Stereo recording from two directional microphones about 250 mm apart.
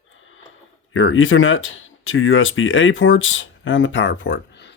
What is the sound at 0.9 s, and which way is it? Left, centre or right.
Speech, left.